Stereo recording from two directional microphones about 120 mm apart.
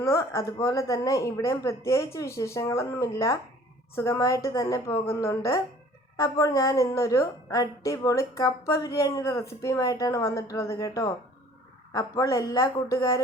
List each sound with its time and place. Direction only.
0.0 s a woman's voice: 25° left (ahead or behind)